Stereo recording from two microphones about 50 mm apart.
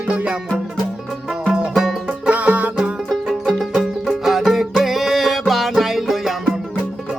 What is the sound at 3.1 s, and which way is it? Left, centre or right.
Music, centre.